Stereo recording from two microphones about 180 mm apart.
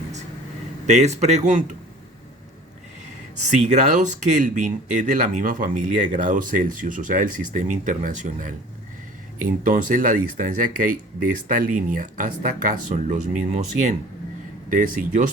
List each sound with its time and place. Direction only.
0.9 s speech: 40° right (ahead or behind)
3.6 s speech: 40° right (ahead or behind)
14.7 s speech: 45° right (ahead or behind)